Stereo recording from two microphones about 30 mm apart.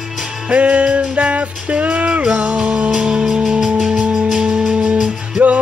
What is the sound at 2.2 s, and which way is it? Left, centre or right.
Speech, right.